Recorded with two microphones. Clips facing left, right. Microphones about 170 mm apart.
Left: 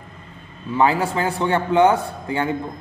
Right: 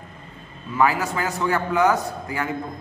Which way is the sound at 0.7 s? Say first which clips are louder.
Left 3 dB; 30° left (ahead or behind).